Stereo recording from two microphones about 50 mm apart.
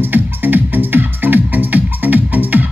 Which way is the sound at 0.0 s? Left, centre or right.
Right.